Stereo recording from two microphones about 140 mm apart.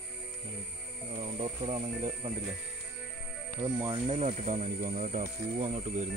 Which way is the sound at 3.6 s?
35° right (ahead or behind).